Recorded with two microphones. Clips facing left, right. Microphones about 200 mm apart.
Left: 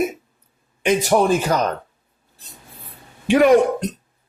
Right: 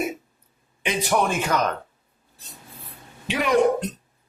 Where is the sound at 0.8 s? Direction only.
45° left (ahead or behind).